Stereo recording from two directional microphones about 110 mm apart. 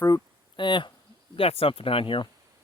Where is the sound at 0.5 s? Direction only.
45° left (ahead or behind).